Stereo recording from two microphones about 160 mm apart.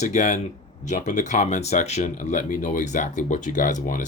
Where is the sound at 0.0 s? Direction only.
45° left (ahead or behind).